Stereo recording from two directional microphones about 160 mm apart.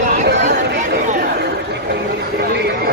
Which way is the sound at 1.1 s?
75° right (ahead or behind).